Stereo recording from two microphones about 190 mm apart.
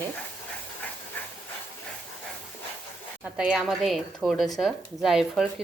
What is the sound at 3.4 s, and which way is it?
A woman's voice, 5° right (ahead or behind).